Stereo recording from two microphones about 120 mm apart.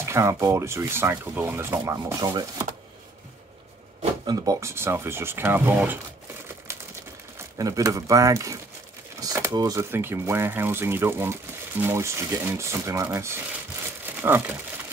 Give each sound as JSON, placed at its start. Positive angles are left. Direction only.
{"t": 0.0, "sound": "speech", "side_deg": -25}
{"t": 4.3, "sound": "speech", "side_deg": -25}
{"t": 7.5, "sound": "speech", "side_deg": -30}